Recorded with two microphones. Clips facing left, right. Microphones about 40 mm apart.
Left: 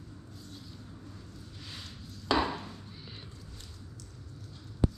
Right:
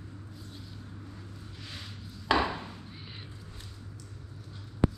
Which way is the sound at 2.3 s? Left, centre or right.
Centre.